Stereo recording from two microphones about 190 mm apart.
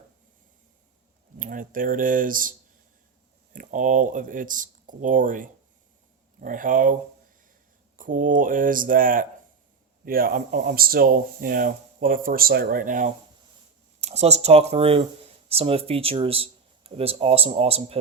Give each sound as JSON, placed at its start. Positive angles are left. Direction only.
{"t": 1.4, "sound": "speech", "side_deg": -45}
{"t": 7.9, "sound": "speech", "side_deg": -45}
{"t": 14.0, "sound": "speech", "side_deg": -35}